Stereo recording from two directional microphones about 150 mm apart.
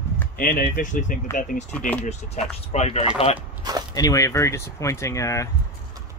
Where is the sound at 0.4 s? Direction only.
70° left (ahead or behind).